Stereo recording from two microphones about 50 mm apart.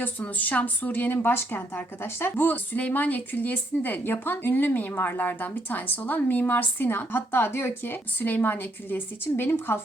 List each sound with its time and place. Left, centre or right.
0.2 s a woman's voice: left